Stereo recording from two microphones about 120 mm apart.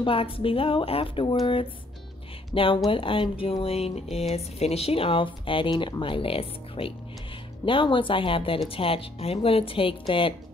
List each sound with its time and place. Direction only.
0.0 s speech: 50° left (ahead or behind)